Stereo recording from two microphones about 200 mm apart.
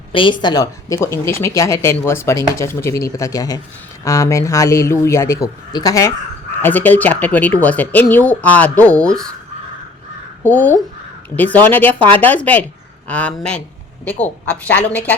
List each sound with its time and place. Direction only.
0.1 s a woman's voice: 25° left (ahead or behind); by 9.3 s 5° left (ahead or behind)
10.4 s speech: 10° left (ahead or behind)